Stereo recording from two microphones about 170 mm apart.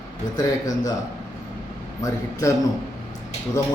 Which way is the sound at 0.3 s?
20° left (ahead or behind).